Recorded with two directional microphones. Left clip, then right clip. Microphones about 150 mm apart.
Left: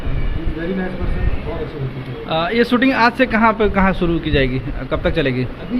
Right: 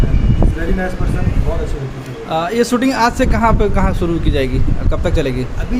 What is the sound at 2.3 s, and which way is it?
Speech, 25° right (ahead or behind).